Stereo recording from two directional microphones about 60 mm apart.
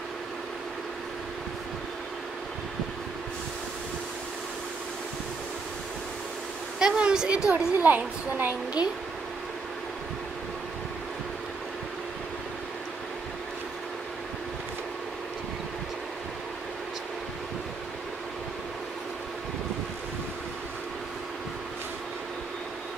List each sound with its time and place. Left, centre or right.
6.8 s a woman's voice: centre; by 8.5 s right